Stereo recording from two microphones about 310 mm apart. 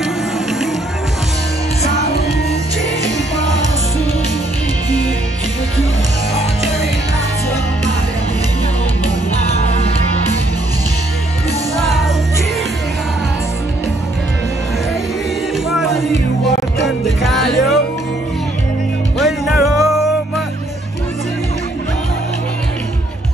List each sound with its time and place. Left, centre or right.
9.5 s music: centre
15.7 s music: centre
19.1 s music: centre